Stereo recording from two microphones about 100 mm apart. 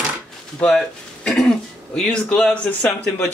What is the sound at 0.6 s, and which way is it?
Speech, 5° left (ahead or behind).